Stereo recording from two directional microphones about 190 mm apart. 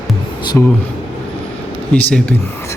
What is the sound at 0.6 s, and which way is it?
Speech, 10° left (ahead or behind).